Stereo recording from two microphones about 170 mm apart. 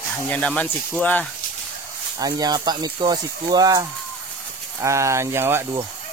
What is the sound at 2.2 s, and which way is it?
Speech, 25° right (ahead or behind).